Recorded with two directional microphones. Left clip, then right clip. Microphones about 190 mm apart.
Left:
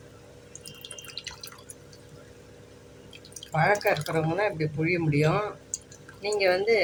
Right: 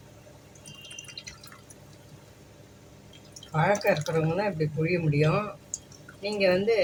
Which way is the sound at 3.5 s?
30° left (ahead or behind).